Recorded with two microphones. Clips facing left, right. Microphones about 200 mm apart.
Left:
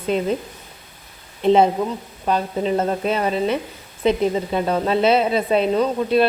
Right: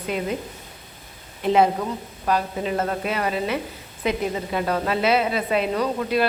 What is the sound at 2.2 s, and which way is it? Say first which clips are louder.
Speech: left 3 dB; 25° left (ahead or behind).